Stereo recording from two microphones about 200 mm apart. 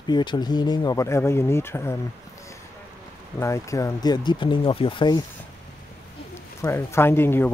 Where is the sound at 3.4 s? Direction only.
15° left (ahead or behind).